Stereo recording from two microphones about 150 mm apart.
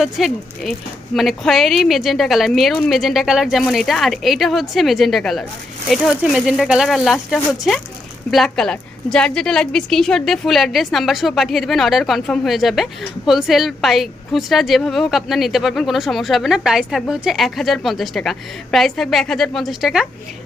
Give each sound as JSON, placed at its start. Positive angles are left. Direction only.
{"t": 0.0, "sound": "a woman's voice", "side_deg": 0}